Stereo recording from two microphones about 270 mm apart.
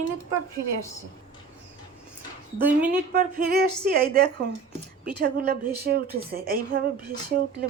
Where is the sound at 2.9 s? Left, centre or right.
Right.